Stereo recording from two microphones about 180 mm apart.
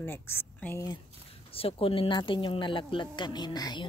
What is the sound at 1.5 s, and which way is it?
Speech, 30° left (ahead or behind).